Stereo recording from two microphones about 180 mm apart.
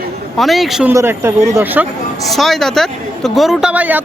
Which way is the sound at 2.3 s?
Centre (ahead or behind).